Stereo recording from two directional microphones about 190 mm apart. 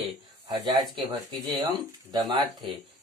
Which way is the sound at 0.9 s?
25° right (ahead or behind).